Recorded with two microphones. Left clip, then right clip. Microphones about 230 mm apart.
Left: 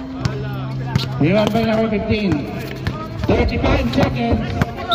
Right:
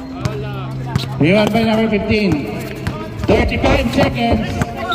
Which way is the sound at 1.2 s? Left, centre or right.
Right.